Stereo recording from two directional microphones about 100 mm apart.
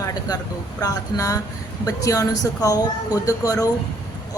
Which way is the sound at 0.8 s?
35° left (ahead or behind).